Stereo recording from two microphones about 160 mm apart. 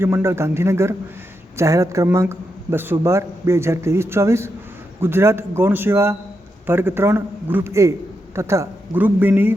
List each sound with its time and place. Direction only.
0.0 s a man's voice: 15° right (ahead or behind)